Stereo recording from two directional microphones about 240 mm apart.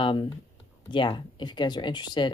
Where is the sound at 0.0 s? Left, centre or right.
Centre.